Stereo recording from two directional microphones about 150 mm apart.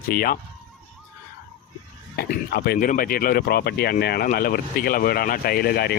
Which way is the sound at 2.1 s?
90° left.